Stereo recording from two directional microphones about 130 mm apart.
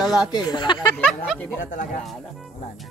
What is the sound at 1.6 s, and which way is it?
Speech, 90° left.